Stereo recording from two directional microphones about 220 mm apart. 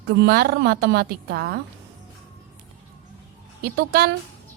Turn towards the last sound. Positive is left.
turn(degrees=-50)  # may be behind; listen again after turning